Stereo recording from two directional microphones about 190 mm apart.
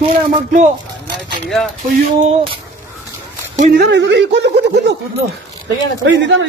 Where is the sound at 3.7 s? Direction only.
65° right (ahead or behind).